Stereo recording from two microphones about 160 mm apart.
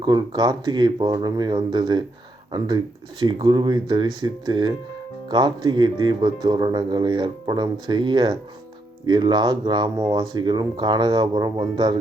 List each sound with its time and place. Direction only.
0.0 s speech: 25° right (ahead or behind)